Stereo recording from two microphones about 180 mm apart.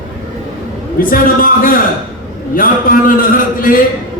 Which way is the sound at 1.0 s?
50° left (ahead or behind).